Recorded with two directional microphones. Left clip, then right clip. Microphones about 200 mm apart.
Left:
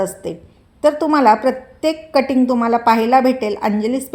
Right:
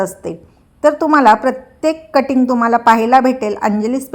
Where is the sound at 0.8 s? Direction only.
30° right (ahead or behind).